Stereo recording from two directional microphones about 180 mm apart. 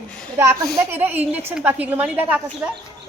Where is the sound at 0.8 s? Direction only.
10° right (ahead or behind).